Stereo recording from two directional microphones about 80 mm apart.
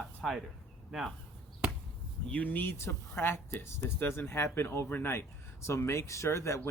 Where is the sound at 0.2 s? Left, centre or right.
Centre.